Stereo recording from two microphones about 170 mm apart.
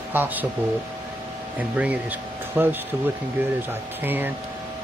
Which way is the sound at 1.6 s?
10° right (ahead or behind).